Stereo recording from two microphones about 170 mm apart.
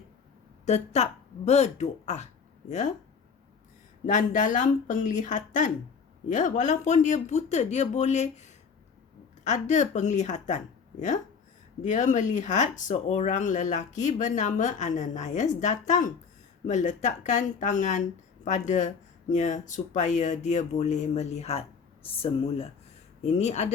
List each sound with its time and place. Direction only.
0.6 s speech: 40° left (ahead or behind)
4.0 s speech: 50° left (ahead or behind)
11.8 s speech: 45° left (ahead or behind)